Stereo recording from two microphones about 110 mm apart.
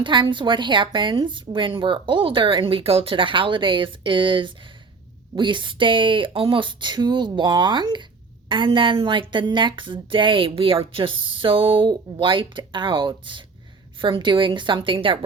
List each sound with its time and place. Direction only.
0.0 s speech: 45° right (ahead or behind)